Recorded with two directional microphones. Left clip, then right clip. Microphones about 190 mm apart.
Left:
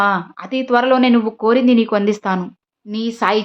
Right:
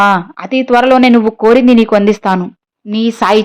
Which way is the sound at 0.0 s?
25° right (ahead or behind).